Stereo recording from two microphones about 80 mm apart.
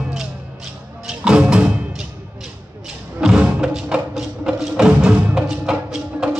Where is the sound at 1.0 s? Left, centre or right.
Centre.